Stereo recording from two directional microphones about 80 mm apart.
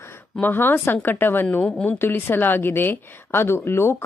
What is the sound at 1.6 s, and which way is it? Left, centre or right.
Speech, centre.